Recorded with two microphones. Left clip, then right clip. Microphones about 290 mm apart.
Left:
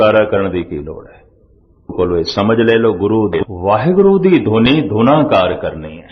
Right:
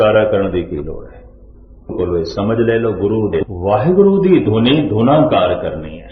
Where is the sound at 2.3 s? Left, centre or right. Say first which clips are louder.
Left 4 dB; left.